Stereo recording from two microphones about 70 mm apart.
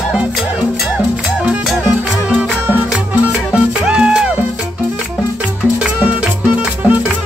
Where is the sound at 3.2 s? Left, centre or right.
Centre.